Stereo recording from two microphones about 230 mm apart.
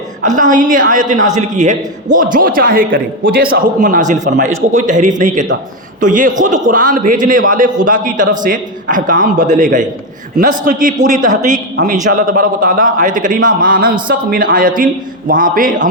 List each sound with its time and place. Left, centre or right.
0.3 s a man's voice: right